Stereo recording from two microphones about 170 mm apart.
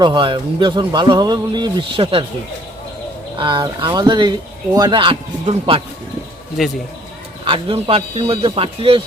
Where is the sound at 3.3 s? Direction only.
30° right (ahead or behind).